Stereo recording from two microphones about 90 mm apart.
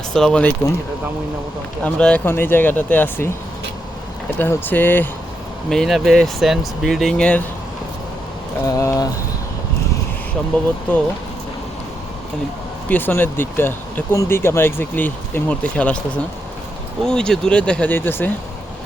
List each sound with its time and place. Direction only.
0.1 s speech: 5° left (ahead or behind)
1.8 s speech: 15° left (ahead or behind)
2.2 s speech: 25° left (ahead or behind)
4.4 s speech: 20° left (ahead or behind)
5.6 s speech: centre (ahead or behind)
8.6 s speech: 35° left (ahead or behind)
12.9 s speech: 20° left (ahead or behind)
17.9 s speech: 25° left (ahead or behind)